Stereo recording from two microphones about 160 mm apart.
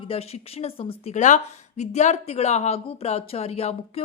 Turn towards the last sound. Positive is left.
turn(degrees=40)  # may be behind; listen again after turning